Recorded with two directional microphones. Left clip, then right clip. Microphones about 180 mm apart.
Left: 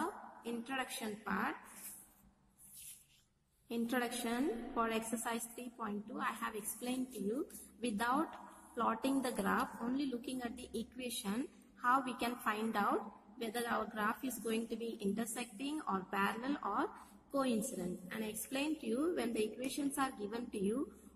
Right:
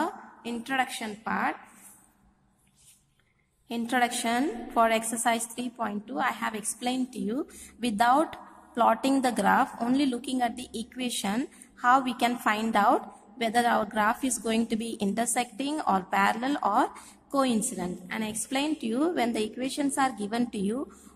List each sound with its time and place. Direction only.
0.0 s a woman's voice: 25° right (ahead or behind)
3.6 s a woman's voice: 25° right (ahead or behind)